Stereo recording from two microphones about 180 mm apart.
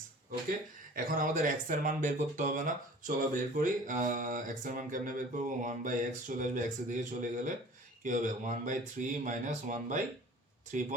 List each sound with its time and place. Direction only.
0.9 s speech: 50° right (ahead or behind)